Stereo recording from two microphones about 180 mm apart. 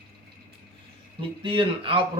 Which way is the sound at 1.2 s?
30° right (ahead or behind).